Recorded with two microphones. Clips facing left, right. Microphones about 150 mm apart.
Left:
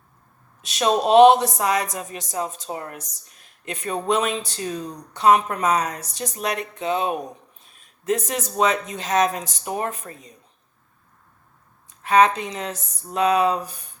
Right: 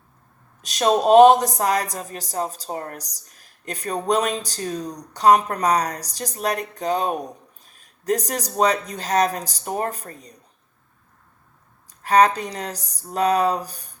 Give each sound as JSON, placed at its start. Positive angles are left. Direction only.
{"t": 0.6, "sound": "speech", "side_deg": -40}
{"t": 11.9, "sound": "speech", "side_deg": -35}